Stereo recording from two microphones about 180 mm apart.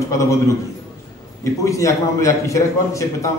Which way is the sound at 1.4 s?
15° left (ahead or behind).